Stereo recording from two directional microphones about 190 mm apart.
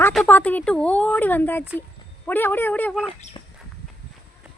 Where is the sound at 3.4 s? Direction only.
25° left (ahead or behind).